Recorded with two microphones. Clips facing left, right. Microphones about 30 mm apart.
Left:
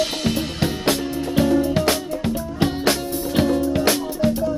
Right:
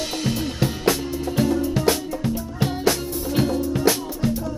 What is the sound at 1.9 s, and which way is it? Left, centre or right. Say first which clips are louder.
Music: even; left.